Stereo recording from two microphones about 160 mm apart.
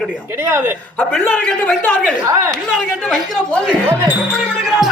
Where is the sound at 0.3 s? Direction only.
15° right (ahead or behind).